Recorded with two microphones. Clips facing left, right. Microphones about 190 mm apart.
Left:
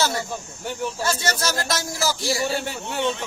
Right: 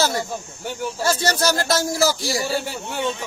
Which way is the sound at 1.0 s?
35° right (ahead or behind).